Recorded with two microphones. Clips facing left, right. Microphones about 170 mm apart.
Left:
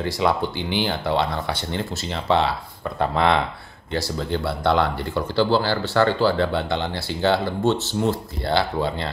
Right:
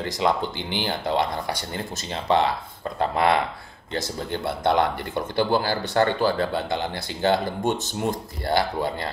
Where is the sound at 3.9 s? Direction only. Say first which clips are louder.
Left 3 dB; 20° right (ahead or behind).